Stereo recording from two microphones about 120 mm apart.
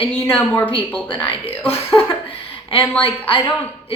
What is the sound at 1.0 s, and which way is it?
Speech, 45° left (ahead or behind).